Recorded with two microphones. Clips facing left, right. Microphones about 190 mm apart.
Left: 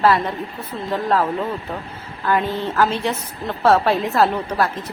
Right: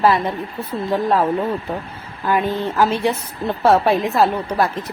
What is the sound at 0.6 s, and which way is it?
A woman's voice, 10° right (ahead or behind).